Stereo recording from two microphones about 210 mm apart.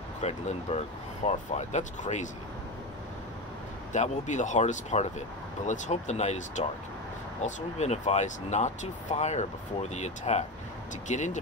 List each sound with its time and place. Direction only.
0.2 s speech: 30° left (ahead or behind)
3.9 s speech: 35° left (ahead or behind)